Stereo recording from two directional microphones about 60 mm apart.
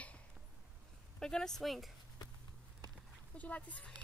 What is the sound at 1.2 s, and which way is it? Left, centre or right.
Speech, centre.